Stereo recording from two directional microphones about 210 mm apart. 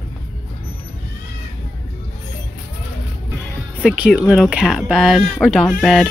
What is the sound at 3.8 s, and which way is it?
Speech, 5° right (ahead or behind).